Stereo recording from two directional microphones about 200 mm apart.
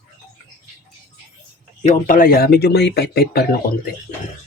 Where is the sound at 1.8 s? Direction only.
45° left (ahead or behind).